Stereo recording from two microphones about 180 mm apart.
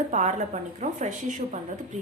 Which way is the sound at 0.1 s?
40° right (ahead or behind).